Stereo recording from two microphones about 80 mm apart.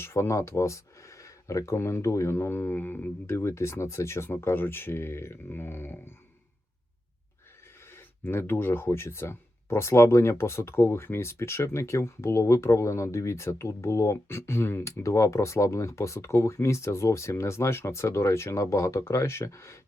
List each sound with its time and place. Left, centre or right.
0.0 s speech: left
7.9 s speech: left